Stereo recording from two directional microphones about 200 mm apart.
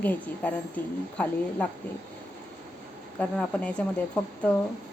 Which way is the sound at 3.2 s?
5° left (ahead or behind).